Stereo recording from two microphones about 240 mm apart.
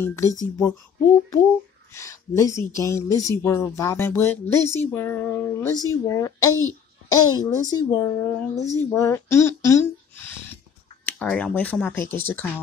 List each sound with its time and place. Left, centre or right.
0.0 s speech: centre
2.0 s speech: centre